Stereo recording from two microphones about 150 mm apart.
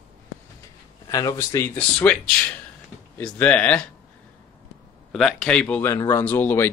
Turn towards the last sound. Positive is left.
turn(degrees=15)  # may be behind; listen again after turning